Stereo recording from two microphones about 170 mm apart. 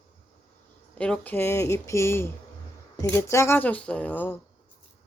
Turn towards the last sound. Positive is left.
turn(degrees=10)  # may be behind; listen again after turning